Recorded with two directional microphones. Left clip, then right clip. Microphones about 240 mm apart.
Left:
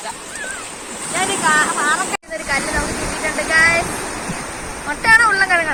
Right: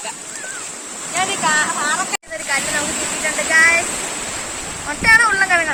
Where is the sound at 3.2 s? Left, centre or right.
Centre.